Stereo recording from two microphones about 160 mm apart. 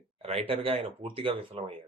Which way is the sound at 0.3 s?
40° right (ahead or behind).